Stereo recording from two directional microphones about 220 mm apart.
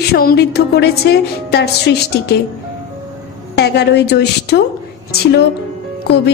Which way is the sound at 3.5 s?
50° left (ahead or behind).